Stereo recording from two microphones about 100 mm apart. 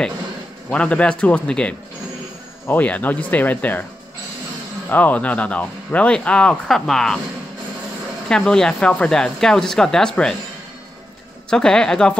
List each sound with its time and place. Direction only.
0.7 s speech: 10° left (ahead or behind)
4.8 s speech: 15° left (ahead or behind)
8.3 s speech: 5° left (ahead or behind)
11.5 s speech: 5° left (ahead or behind)